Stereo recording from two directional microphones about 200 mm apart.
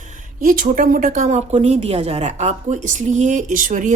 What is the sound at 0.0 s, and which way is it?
A woman's voice, 40° right (ahead or behind).